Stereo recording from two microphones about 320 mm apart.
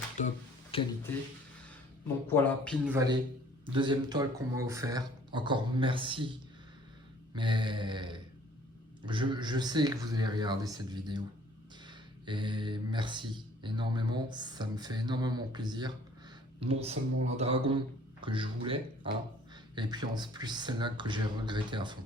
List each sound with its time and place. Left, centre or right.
0.2 s a sound: centre
2.2 s speech: centre
2.9 s speech: centre
7.3 s speech: centre